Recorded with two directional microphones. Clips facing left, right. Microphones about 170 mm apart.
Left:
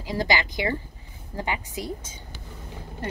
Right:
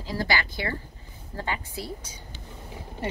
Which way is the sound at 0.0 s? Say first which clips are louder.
Left 3 dB; 20° left (ahead or behind).